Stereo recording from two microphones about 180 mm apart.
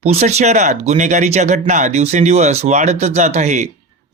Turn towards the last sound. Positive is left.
turn(degrees=-40)  # may be behind; listen again after turning